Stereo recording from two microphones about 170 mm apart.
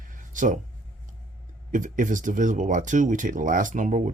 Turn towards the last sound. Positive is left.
turn(degrees=-50)  # may be behind; listen again after turning